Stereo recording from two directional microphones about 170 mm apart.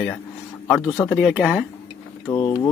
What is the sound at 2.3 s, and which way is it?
Speech, 25° left (ahead or behind).